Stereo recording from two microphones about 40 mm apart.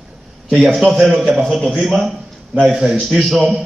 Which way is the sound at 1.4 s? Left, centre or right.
Centre.